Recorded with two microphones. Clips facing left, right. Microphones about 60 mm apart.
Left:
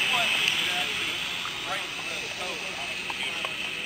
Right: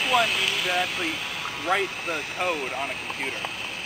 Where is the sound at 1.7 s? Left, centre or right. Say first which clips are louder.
Right 12 dB; right.